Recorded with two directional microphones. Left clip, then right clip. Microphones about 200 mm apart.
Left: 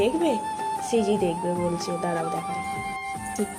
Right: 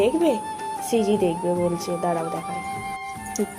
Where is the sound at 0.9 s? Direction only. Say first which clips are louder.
Right 3 dB; 25° right (ahead or behind).